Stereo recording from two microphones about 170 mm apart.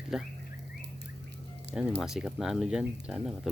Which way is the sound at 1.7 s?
5° right (ahead or behind).